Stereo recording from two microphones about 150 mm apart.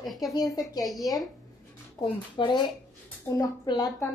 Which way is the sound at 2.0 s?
25° left (ahead or behind).